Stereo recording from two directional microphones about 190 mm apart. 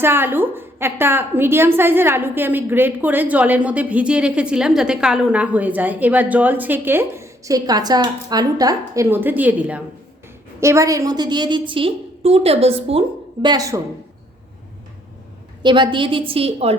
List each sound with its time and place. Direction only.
0.0 s a woman's voice: 10° right (ahead or behind)
15.6 s a woman's voice: 25° right (ahead or behind)